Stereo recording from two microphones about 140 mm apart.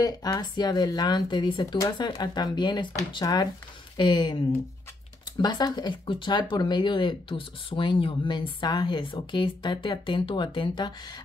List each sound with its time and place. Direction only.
0.0 s speech: 30° left (ahead or behind)
5.4 s speech: 30° left (ahead or behind)